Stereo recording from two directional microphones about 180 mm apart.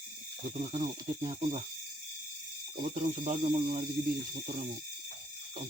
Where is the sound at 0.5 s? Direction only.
40° right (ahead or behind).